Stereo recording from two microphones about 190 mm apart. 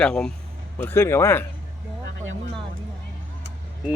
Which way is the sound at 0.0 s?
5° left (ahead or behind).